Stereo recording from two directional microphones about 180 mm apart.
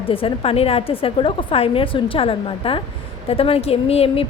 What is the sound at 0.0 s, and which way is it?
A woman's voice, 30° left (ahead or behind).